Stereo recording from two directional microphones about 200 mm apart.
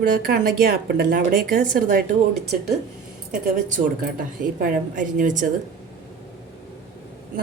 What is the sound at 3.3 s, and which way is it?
A woman's voice, 40° right (ahead or behind).